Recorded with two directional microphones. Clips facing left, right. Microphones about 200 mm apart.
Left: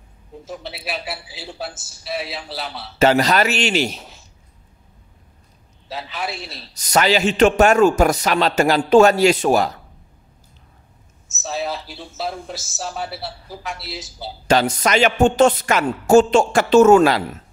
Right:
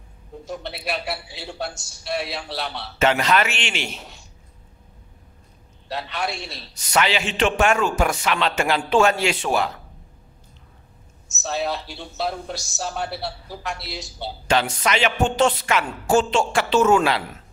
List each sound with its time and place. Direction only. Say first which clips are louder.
0.5 s a man's voice: right 1 dB; centre (ahead or behind)
3.0 s a man's voice: left 4 dB; 40° left (ahead or behind)
4.0 s a sound: even; centre (ahead or behind)
5.9 s a man's voice: right 1 dB; centre (ahead or behind)
6.7 s a man's voice: left 4 dB; 40° left (ahead or behind)
11.2 s a man's voice: even; centre (ahead or behind)
14.5 s a woman's voice: left 4 dB; 40° left (ahead or behind)